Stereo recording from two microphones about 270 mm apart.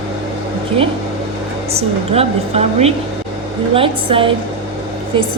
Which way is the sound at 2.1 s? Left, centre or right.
Right.